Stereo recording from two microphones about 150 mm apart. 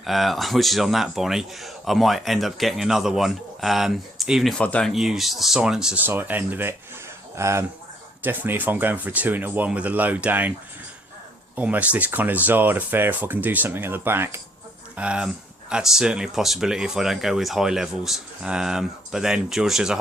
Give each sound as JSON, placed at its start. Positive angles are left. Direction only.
{"t": 0.0, "sound": "speech", "side_deg": 0}
{"t": 11.5, "sound": "speech", "side_deg": -10}